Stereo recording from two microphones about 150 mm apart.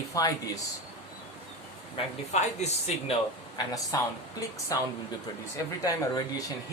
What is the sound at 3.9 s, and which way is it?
Speech, 25° left (ahead or behind).